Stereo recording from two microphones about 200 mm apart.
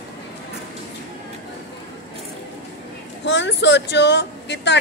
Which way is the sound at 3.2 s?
60° left (ahead or behind).